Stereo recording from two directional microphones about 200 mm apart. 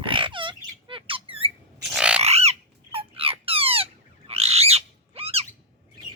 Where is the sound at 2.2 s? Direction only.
30° right (ahead or behind).